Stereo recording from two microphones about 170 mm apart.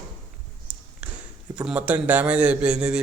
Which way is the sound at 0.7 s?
5° right (ahead or behind).